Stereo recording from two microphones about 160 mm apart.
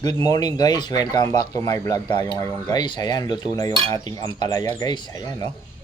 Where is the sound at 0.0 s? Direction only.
25° left (ahead or behind).